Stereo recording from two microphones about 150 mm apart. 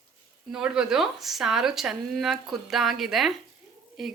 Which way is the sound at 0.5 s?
5° right (ahead or behind).